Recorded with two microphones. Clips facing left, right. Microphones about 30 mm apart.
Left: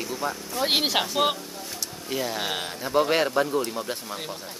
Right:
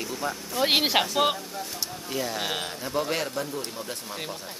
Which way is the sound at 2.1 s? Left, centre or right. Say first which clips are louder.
Left 2 dB; centre.